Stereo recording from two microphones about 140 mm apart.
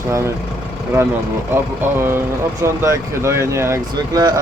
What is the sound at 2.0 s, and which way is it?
Speech, 15° right (ahead or behind).